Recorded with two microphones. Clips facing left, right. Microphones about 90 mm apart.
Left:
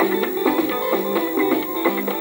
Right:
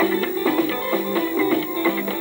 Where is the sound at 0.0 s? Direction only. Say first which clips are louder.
Left 1 dB; 25° left (ahead or behind).